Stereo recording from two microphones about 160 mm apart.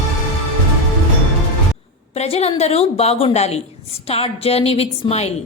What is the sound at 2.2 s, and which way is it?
A woman's voice, 40° left (ahead or behind).